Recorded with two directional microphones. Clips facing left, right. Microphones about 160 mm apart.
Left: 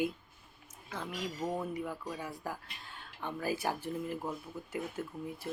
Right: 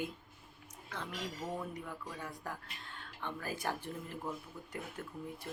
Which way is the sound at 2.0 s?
10° left (ahead or behind).